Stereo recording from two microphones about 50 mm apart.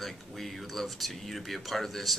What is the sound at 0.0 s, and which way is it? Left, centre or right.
Speech, centre.